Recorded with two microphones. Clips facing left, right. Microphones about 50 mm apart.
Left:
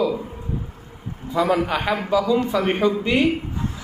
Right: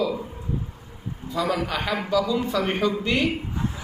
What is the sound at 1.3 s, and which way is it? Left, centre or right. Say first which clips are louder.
A man's voice: left 5 dB; left.